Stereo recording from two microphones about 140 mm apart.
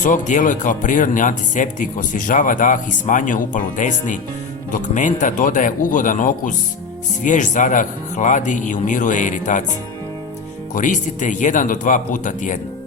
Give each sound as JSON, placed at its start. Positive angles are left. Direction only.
{"t": 0.0, "sound": "speech", "side_deg": 65}
{"t": 10.8, "sound": "speech", "side_deg": 65}